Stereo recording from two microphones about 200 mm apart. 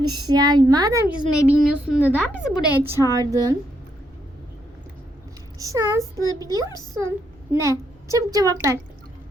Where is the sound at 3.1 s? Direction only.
15° right (ahead or behind).